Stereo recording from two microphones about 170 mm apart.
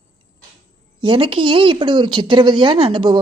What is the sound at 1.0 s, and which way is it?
Speech, 30° right (ahead or behind).